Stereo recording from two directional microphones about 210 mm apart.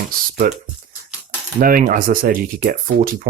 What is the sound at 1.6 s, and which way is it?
Speech, 40° right (ahead or behind).